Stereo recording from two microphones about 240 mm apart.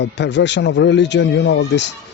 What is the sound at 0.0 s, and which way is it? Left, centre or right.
Speech, left.